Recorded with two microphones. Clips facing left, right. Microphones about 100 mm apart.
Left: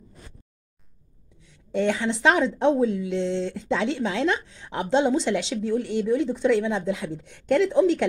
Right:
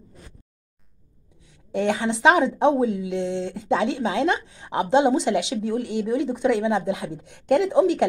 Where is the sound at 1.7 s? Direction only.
50° right (ahead or behind).